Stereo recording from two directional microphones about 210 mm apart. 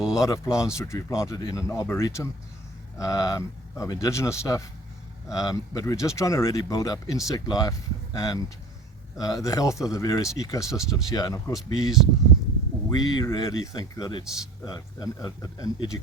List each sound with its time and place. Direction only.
0.1 s speech: 15° left (ahead or behind)
10.7 s speech: centre (ahead or behind)
11.1 s speech: 20° left (ahead or behind)
11.5 s speech: centre (ahead or behind)
12.9 s speech: 20° left (ahead or behind)